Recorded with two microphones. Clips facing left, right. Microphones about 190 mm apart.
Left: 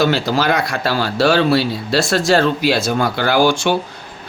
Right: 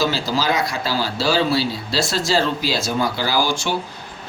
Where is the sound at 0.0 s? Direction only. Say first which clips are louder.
Left 5 dB; 60° left (ahead or behind).